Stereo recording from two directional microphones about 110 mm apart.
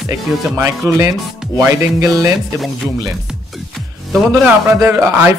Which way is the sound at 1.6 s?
25° right (ahead or behind).